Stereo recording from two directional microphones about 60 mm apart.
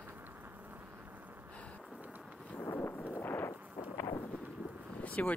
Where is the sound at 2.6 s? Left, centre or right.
Left.